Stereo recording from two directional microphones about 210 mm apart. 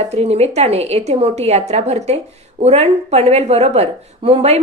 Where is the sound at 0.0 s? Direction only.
30° right (ahead or behind).